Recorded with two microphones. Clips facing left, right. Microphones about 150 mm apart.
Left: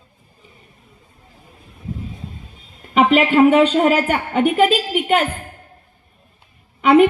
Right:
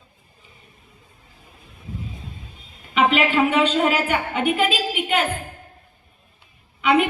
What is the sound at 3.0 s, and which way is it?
A woman's voice, 45° left (ahead or behind).